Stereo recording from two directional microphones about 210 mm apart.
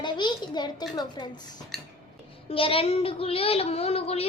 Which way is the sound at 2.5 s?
25° left (ahead or behind).